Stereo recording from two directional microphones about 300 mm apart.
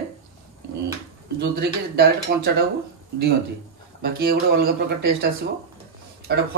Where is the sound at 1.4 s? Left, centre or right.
Right.